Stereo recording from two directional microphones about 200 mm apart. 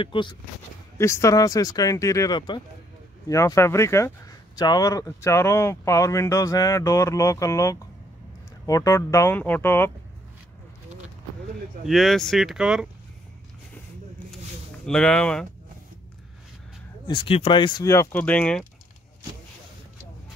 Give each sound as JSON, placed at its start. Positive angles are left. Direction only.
{"t": 0.0, "sound": "speech", "side_deg": 25}
{"t": 0.9, "sound": "speech", "side_deg": 15}
{"t": 11.8, "sound": "speech", "side_deg": 0}
{"t": 14.9, "sound": "speech", "side_deg": 5}
{"t": 17.1, "sound": "speech", "side_deg": 30}